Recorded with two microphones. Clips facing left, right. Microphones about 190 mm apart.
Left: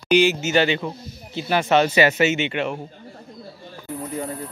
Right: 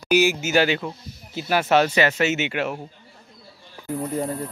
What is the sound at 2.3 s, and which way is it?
Speech, 5° right (ahead or behind).